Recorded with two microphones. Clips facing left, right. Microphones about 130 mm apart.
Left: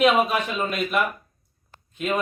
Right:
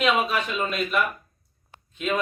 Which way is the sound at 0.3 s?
45° left (ahead or behind).